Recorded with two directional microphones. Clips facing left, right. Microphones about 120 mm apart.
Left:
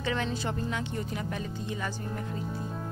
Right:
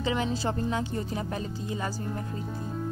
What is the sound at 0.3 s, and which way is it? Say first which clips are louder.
Speech: right 3 dB; 30° right (ahead or behind).